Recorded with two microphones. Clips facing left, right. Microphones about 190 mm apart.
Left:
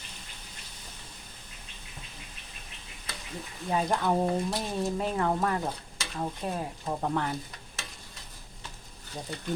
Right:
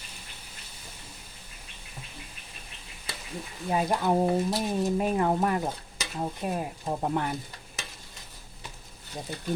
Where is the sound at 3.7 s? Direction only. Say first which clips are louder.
Right 2 dB; 10° right (ahead or behind).